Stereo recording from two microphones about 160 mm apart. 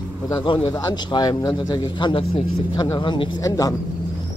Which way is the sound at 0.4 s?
35° left (ahead or behind).